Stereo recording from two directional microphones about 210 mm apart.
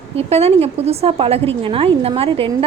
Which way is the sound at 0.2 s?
30° right (ahead or behind).